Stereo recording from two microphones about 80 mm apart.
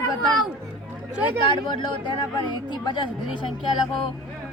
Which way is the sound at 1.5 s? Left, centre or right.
Left.